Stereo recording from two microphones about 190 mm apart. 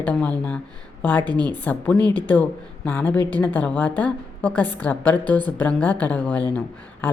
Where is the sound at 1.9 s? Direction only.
20° right (ahead or behind).